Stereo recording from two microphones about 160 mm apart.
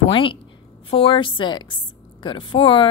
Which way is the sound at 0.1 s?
30° left (ahead or behind).